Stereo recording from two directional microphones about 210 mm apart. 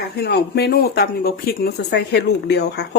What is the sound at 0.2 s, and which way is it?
Speech, 50° left (ahead or behind).